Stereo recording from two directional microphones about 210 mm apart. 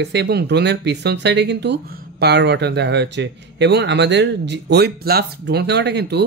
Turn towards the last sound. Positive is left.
turn(degrees=-50)  # may be behind; listen again after turning